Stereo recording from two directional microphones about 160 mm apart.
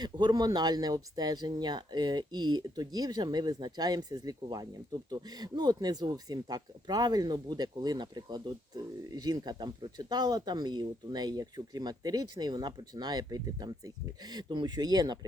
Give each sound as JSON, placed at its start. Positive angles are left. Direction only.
{"t": 0.0, "sound": "speech", "side_deg": -25}